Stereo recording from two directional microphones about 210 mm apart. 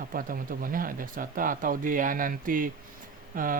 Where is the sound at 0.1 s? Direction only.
40° right (ahead or behind).